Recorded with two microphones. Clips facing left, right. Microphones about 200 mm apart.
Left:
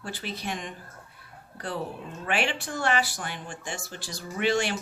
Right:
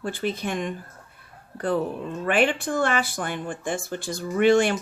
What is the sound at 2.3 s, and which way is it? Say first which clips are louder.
Speech: right 7 dB; 50° right (ahead or behind).